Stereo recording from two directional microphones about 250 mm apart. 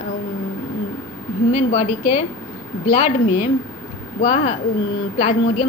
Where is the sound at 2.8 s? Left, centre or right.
Left.